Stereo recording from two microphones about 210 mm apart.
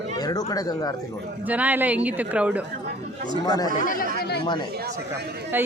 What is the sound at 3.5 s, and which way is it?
Speech, 20° left (ahead or behind).